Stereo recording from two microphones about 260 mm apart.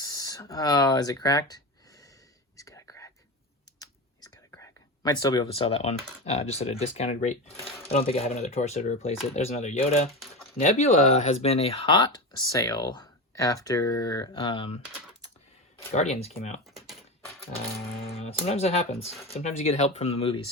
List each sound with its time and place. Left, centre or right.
0.0 s a sound: centre
2.6 s whispering: centre
3.8 s speech: centre
15.9 s speech: left
16.6 s a sound: centre
18.1 s speech: left